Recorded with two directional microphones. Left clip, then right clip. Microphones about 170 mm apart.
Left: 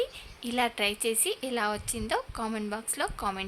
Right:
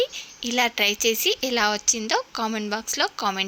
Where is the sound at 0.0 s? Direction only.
20° right (ahead or behind).